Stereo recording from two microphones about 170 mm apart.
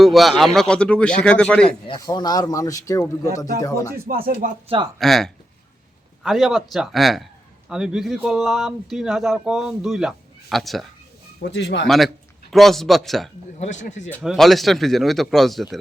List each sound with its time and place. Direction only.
0.0 s speech: centre (ahead or behind)
2.0 s speech: 20° left (ahead or behind)
4.1 s speech: 60° right (ahead or behind)
4.4 s speech: 45° right (ahead or behind)
4.9 s speech: centre (ahead or behind)
11.4 s speech: 90° left
11.9 s speech: centre (ahead or behind)
13.6 s speech: 45° left (ahead or behind)
14.3 s speech: centre (ahead or behind)